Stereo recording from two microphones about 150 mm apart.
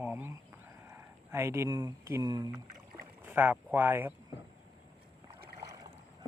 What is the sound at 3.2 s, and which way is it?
Speech, 10° right (ahead or behind).